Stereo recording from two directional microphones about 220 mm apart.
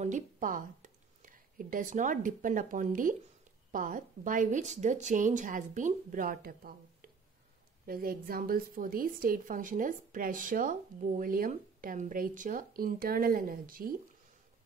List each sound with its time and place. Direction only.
0.0 s a woman's voice: 35° right (ahead or behind)